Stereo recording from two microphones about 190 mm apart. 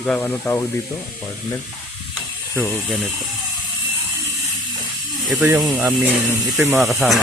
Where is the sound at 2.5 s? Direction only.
5° left (ahead or behind).